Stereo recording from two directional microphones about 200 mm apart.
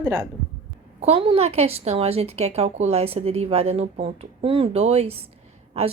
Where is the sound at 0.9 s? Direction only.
30° right (ahead or behind).